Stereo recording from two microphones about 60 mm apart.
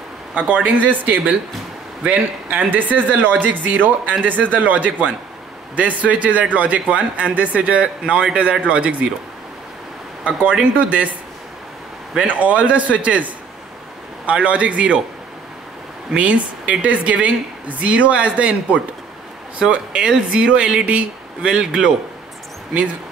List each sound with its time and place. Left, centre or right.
0.3 s a woman's voice: right
10.2 s a woman's voice: centre
12.3 s a woman's voice: right
16.1 s a woman's voice: right